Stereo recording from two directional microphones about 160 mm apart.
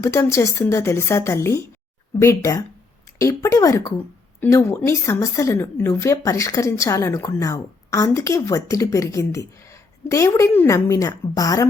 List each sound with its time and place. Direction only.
0.0 s a woman's voice: 20° left (ahead or behind)